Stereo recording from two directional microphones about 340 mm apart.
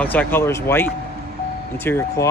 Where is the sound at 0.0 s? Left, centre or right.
Centre.